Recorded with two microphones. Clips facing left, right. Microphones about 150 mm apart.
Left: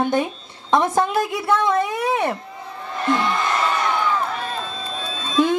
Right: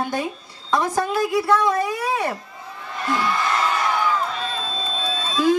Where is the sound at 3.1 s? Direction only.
25° left (ahead or behind).